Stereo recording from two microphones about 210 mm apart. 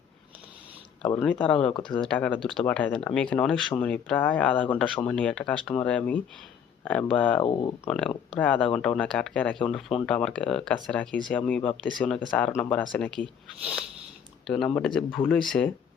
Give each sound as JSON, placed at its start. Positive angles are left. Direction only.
{"t": 1.2, "sound": "speech", "side_deg": 5}
{"t": 1.7, "sound": "speech", "side_deg": 20}
{"t": 2.0, "sound": "speech", "side_deg": 5}